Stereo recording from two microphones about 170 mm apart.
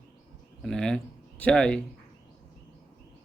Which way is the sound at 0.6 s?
5° left (ahead or behind).